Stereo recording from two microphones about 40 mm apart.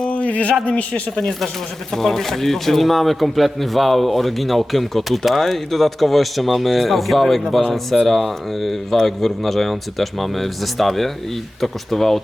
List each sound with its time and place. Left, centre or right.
0.1 s a sound: left
0.6 s a man's voice: left
1.2 s a man's voice: centre